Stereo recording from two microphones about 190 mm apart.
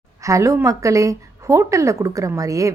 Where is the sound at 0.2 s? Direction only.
15° right (ahead or behind).